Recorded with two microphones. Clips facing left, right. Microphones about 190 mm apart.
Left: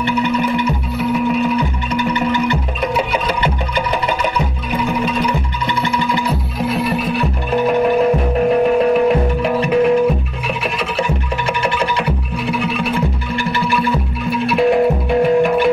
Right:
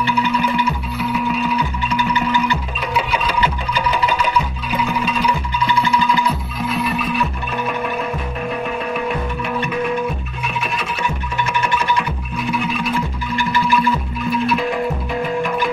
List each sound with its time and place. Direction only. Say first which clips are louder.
0.7 s music: left 4 dB; 55° left (ahead or behind)
8.6 s music: left 10 dB; 65° left (ahead or behind)
12.5 s music: left 2 dB; 60° left (ahead or behind)
14.6 s music: left 8 dB; 55° left (ahead or behind)